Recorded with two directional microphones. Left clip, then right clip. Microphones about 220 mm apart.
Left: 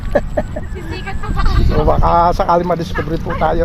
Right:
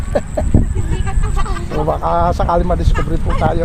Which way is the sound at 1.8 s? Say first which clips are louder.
Left 3 dB; 40° left (ahead or behind).